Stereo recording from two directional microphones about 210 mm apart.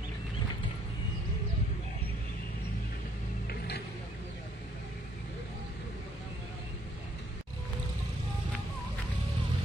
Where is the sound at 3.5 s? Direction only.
50° left (ahead or behind).